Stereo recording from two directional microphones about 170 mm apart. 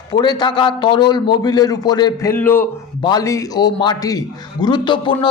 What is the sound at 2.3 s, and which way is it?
A man's voice, 10° left (ahead or behind).